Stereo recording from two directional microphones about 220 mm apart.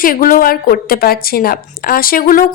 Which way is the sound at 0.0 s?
40° left (ahead or behind).